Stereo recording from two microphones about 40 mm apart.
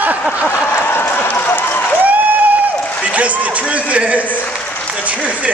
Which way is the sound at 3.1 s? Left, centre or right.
Right.